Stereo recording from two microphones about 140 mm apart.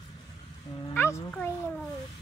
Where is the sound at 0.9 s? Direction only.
20° left (ahead or behind).